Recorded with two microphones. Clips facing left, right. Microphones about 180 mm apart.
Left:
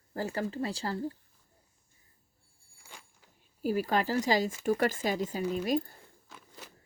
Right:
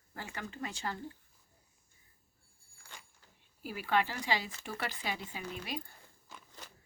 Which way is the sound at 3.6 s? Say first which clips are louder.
Left 4 dB; 40° left (ahead or behind).